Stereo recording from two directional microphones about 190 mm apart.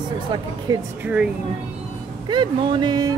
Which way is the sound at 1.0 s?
5° right (ahead or behind).